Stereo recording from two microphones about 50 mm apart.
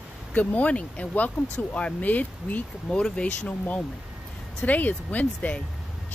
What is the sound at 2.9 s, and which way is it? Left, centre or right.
Speech, left.